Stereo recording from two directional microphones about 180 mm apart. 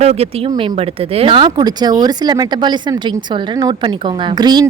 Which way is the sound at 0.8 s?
35° right (ahead or behind).